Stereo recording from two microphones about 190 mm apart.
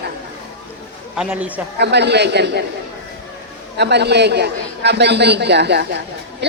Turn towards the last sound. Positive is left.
turn(degrees=-60)  # may be behind; listen again after turning